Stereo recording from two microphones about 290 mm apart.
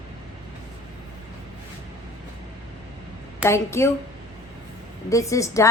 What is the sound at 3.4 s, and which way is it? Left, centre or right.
Speech, centre.